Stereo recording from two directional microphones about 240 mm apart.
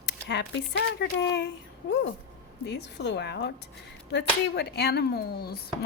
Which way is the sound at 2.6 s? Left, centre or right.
Left.